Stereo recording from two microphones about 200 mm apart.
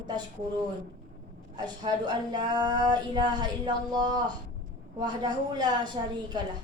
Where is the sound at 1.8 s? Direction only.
20° right (ahead or behind).